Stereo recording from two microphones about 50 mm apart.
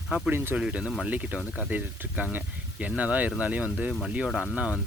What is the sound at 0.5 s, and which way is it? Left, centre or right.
Speech, centre.